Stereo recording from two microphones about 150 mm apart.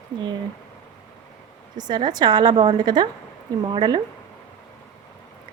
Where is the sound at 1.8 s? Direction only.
30° right (ahead or behind).